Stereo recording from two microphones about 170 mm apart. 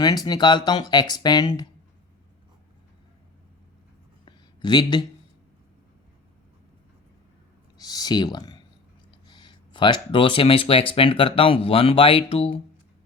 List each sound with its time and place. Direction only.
0.3 s speech: 25° left (ahead or behind)
4.3 s a sound: 25° left (ahead or behind)
7.8 s speech: 25° left (ahead or behind)